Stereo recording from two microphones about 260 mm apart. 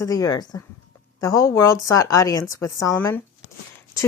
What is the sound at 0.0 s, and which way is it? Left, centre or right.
Speech, centre.